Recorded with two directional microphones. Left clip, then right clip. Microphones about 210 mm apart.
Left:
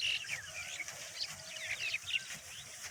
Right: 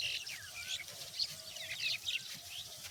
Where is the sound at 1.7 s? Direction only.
55° right (ahead or behind).